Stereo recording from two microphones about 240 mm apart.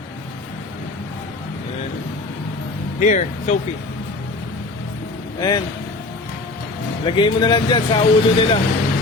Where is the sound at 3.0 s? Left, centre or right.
Left.